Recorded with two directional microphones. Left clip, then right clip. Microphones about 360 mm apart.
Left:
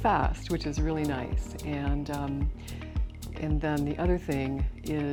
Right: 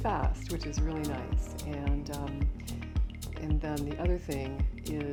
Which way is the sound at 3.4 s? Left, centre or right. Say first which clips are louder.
Left 6 dB; left.